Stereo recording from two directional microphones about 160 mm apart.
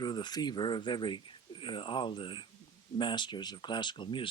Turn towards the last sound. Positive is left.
turn(degrees=30)  # may be behind; listen again after turning